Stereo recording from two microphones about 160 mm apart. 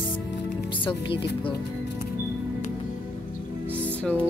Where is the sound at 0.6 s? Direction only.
30° left (ahead or behind).